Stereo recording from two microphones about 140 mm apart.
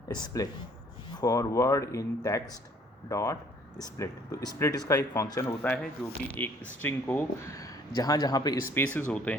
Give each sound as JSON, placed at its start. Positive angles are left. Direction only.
{"t": 0.1, "sound": "speech", "side_deg": 30}
{"t": 7.5, "sound": "a man's voice", "side_deg": 25}
{"t": 8.7, "sound": "speech", "side_deg": 15}